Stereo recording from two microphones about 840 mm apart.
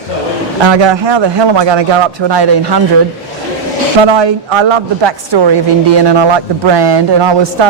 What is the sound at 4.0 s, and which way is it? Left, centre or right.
A woman's voice, right.